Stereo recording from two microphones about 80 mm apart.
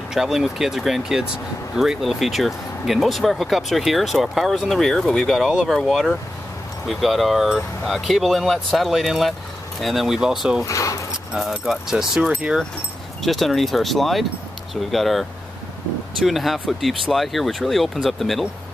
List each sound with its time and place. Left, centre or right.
0.1 s speech: centre
10.6 s speech: left
11.3 s speech: centre
12.2 s speech: centre
13.2 s speech: centre